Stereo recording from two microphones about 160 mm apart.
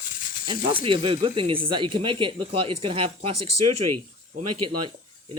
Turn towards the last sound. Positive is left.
turn(degrees=-30)  # may be behind; listen again after turning